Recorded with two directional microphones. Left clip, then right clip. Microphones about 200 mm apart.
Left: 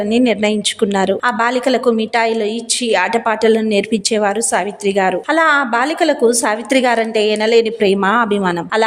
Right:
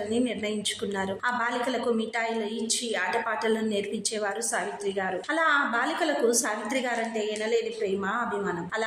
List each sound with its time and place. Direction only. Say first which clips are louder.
0.1 s a woman's voice: left 16 dB; 35° left (ahead or behind)